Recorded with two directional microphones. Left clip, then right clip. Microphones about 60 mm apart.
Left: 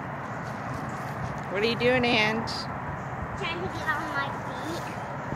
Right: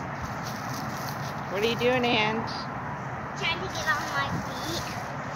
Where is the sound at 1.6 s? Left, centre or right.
Left.